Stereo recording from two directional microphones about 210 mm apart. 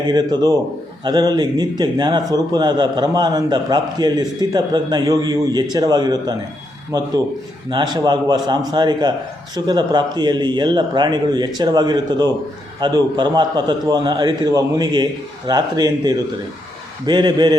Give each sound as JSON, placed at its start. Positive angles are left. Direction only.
{"t": 0.1, "sound": "a man's voice", "side_deg": -20}
{"t": 7.7, "sound": "a man's voice", "side_deg": -20}